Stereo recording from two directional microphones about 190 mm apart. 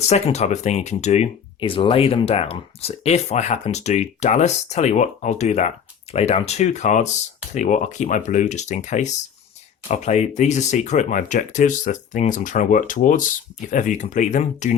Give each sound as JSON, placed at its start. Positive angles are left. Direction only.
{"t": 0.1, "sound": "speech", "side_deg": 35}